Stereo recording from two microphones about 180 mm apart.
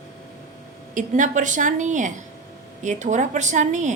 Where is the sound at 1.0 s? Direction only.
45° right (ahead or behind).